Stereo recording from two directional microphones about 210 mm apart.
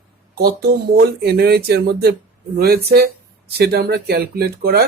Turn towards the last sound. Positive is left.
turn(degrees=-50)  # may be behind; listen again after turning